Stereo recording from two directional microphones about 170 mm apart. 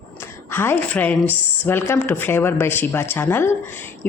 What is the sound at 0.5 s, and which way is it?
Speech, 10° left (ahead or behind).